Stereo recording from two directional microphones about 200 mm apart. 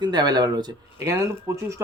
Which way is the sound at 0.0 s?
20° right (ahead or behind).